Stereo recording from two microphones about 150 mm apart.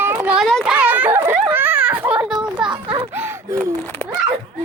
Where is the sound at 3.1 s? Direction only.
15° right (ahead or behind).